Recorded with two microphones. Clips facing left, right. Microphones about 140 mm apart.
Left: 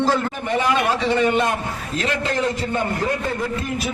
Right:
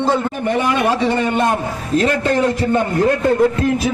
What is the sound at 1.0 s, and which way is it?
Speech, 50° right (ahead or behind).